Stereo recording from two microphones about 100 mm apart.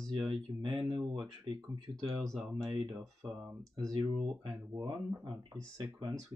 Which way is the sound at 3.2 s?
45° right (ahead or behind).